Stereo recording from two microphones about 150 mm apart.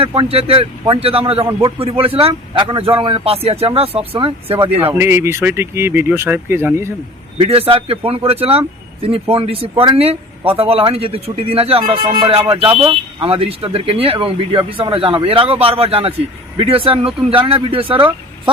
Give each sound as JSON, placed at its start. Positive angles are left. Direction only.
{"t": 0.0, "sound": "speech", "side_deg": -35}
{"t": 4.9, "sound": "speech", "side_deg": -15}
{"t": 7.3, "sound": "speech", "side_deg": -40}
{"t": 12.0, "sound": "speech", "side_deg": -30}